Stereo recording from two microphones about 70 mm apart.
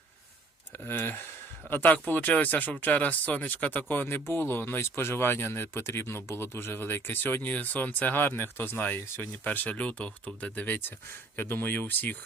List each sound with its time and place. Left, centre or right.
0.9 s speech: left
9.5 s speech: left